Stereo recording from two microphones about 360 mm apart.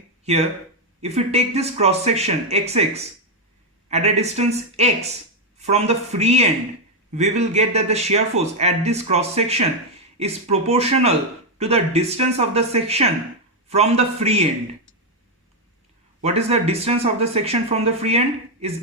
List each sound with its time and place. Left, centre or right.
1.0 s speech: centre
16.2 s speech: centre